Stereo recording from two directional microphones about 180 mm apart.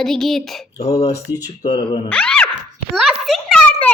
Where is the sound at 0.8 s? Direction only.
35° left (ahead or behind).